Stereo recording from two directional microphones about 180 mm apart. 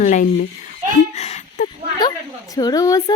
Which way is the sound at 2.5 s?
20° left (ahead or behind).